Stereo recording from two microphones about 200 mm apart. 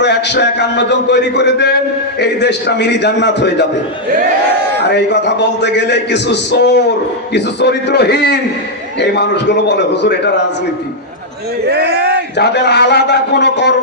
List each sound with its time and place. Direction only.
0.0 s a man's voice: 60° left (ahead or behind)
4.8 s a man's voice: 60° left (ahead or behind)
11.6 s speech: 55° right (ahead or behind)
12.4 s a man's voice: 55° left (ahead or behind)